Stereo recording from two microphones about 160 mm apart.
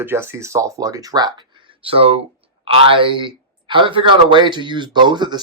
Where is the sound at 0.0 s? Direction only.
15° right (ahead or behind).